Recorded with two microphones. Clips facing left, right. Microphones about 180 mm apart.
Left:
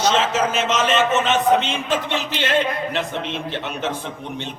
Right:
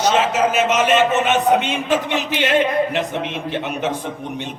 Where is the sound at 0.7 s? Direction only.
10° right (ahead or behind).